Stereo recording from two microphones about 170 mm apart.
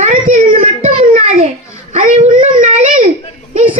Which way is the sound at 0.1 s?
55° right (ahead or behind).